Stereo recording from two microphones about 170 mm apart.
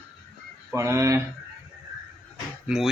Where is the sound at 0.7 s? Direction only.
15° right (ahead or behind).